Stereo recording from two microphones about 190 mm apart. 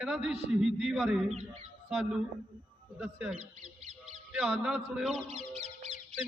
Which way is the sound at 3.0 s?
5° right (ahead or behind).